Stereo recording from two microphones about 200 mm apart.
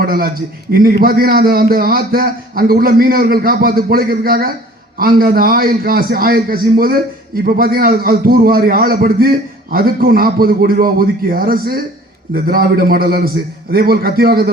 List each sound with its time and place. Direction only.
0.0 s a man's voice: 50° right (ahead or behind)